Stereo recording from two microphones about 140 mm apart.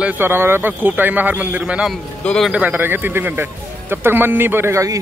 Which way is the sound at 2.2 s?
5° left (ahead or behind).